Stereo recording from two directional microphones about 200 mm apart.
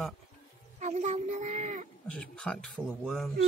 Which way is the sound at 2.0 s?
5° left (ahead or behind).